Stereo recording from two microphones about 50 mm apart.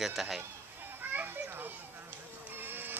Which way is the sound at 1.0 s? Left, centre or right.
Right.